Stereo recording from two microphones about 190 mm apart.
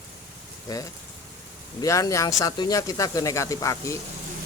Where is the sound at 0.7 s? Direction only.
20° left (ahead or behind).